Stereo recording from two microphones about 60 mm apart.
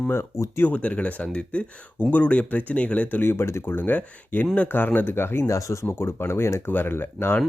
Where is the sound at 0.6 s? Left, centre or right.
Left.